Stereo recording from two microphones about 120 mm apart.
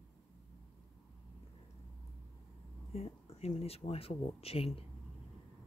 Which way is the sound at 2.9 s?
60° left (ahead or behind).